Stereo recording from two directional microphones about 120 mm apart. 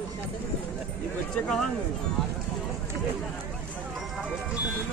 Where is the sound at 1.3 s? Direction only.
5° left (ahead or behind).